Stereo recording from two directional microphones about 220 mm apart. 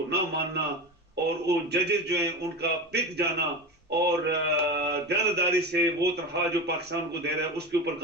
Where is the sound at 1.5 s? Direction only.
50° right (ahead or behind).